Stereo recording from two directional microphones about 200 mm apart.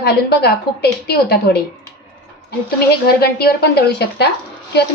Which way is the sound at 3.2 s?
50° left (ahead or behind).